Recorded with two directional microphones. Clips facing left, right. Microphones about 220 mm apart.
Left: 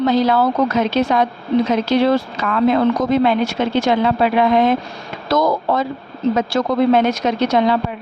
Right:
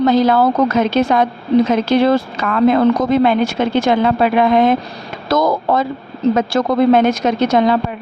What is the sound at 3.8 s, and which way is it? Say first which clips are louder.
Speech: right 2 dB; 50° right (ahead or behind).